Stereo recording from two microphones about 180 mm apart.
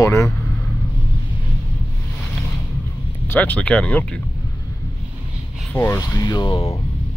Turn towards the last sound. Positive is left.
turn(degrees=30)  # may be behind; listen again after turning